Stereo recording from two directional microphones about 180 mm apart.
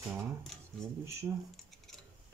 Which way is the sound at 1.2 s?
15° right (ahead or behind).